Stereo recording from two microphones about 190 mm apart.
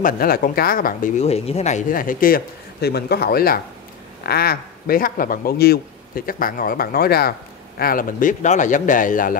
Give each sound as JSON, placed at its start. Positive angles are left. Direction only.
{"t": 0.0, "sound": "speech", "side_deg": 50}